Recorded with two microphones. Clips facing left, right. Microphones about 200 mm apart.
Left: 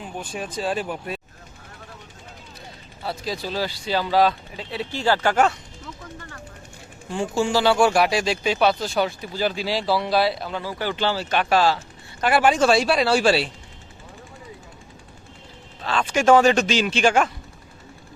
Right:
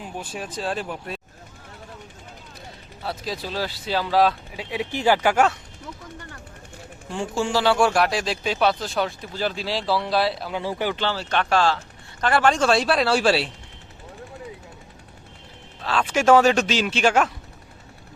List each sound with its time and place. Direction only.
0.0 s speech: 5° right (ahead or behind)
3.0 s speech: centre (ahead or behind)
4.6 s speech: 15° right (ahead or behind)
7.1 s speech: centre (ahead or behind)
10.6 s speech: 25° right (ahead or behind)
10.9 s speech: 10° left (ahead or behind)
15.8 s speech: 5° right (ahead or behind)